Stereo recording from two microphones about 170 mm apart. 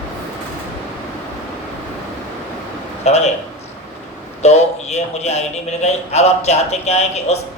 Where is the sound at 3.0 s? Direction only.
40° left (ahead or behind).